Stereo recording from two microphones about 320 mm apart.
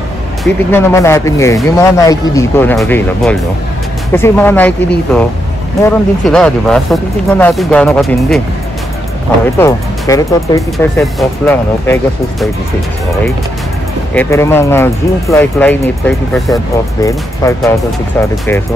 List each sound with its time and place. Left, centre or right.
0.4 s speech: centre
9.6 s speech: centre
14.1 s speech: centre
17.0 s speech: centre